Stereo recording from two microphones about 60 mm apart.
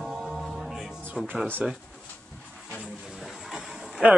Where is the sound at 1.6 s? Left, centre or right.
Right.